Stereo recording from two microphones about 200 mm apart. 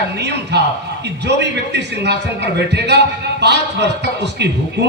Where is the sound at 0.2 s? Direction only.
55° right (ahead or behind).